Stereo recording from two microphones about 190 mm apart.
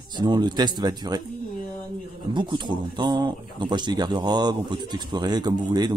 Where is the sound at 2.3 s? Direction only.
25° right (ahead or behind).